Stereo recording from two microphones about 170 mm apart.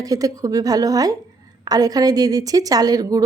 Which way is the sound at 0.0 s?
20° right (ahead or behind).